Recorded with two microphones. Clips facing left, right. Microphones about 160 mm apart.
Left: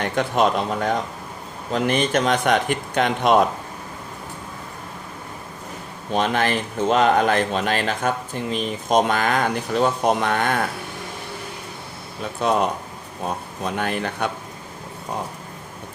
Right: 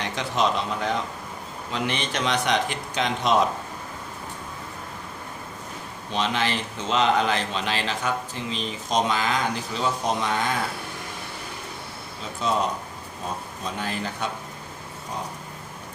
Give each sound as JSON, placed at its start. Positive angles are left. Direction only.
{"t": 0.0, "sound": "speech", "side_deg": 50}
{"t": 6.1, "sound": "speech", "side_deg": 50}
{"t": 12.4, "sound": "speech", "side_deg": 60}